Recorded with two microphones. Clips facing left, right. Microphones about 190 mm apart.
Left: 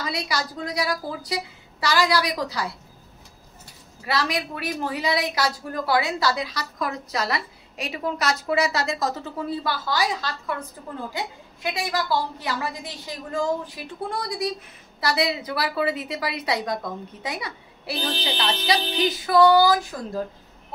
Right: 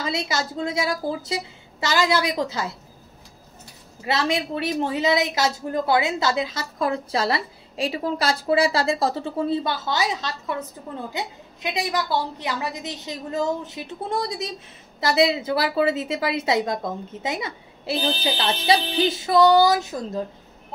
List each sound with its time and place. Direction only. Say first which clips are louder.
0.0 s a woman's voice: right 2 dB; 25° right (ahead or behind)
4.0 s a woman's voice: right 2 dB; 25° right (ahead or behind)